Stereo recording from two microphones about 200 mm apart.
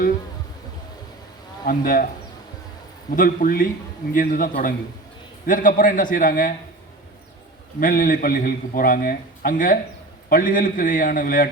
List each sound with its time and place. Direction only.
1.6 s a man's voice: 45° left (ahead or behind)
3.2 s a man's voice: 45° left (ahead or behind)
7.8 s a man's voice: 45° left (ahead or behind)